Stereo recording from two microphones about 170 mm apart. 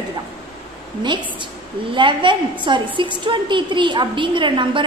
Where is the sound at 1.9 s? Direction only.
30° right (ahead or behind).